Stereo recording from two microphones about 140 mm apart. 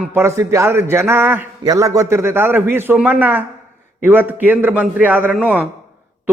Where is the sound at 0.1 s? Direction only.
20° right (ahead or behind).